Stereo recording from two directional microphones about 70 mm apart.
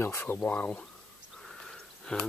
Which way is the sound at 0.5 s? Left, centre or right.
Left.